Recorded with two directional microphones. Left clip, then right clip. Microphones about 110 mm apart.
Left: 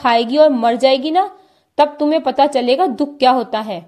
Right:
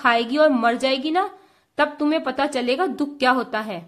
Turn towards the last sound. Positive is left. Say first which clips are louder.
# left 6 dB
turn(degrees=25)  # may be behind; listen again after turning